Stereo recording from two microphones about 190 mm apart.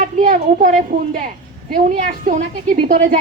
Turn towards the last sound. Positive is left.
turn(degrees=-40)  # may be behind; listen again after turning